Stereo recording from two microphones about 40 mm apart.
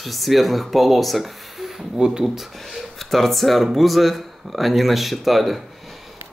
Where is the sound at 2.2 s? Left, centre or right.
Centre.